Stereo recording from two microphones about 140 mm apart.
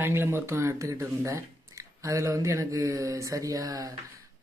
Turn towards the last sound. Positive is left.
turn(degrees=-25)  # may be behind; listen again after turning